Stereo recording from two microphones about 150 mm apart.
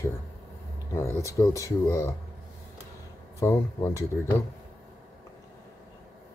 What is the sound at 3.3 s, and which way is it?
Speech, 15° left (ahead or behind).